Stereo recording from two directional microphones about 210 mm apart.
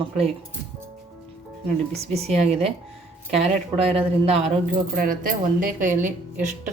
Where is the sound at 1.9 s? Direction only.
30° right (ahead or behind).